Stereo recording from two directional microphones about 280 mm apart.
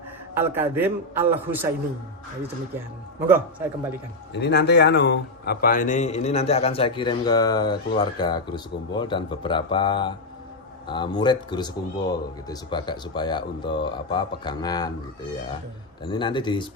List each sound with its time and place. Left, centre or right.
0.3 s a man's voice: centre
2.7 s a man's voice: centre
4.4 s a man's voice: left; by 14.8 s centre
16.0 s a man's voice: centre